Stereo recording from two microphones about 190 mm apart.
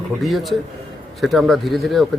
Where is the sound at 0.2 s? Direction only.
Centre (ahead or behind).